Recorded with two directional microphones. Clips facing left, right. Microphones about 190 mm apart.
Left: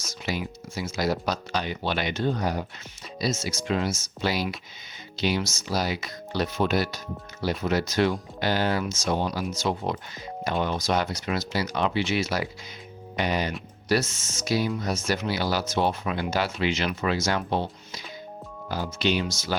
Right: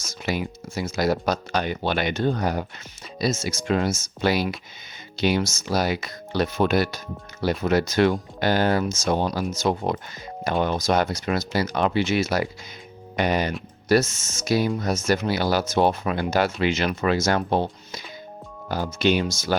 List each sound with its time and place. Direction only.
0.0 s speech: 50° right (ahead or behind)